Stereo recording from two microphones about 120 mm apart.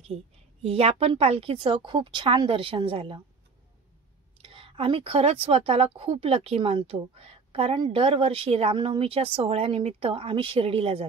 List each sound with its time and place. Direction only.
0.0 s a woman's voice: 55° right (ahead or behind)
4.4 s a woman's voice: 50° right (ahead or behind)